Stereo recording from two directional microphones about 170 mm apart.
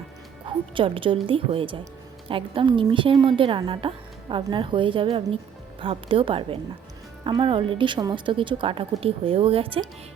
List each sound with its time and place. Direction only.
0.7 s a woman's voice: 30° right (ahead or behind)